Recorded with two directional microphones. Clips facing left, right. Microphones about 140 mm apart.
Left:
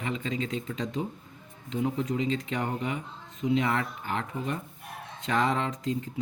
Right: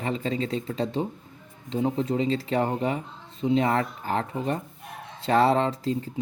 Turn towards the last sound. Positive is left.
turn(degrees=-35)  # may be behind; listen again after turning